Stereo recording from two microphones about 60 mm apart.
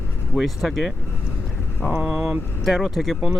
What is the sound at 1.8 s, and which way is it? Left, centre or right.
Speech, centre.